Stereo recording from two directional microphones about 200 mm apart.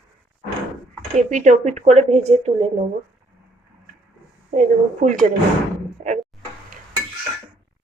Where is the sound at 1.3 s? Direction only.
40° right (ahead or behind).